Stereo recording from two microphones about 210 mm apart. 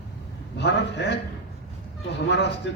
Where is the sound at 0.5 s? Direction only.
55° left (ahead or behind).